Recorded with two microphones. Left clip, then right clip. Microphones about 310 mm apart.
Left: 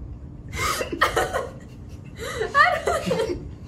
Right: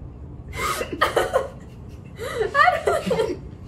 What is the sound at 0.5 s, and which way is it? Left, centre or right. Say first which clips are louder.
Chuckle: even; centre.